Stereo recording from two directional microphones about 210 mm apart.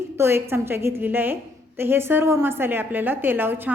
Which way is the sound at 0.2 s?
10° right (ahead or behind).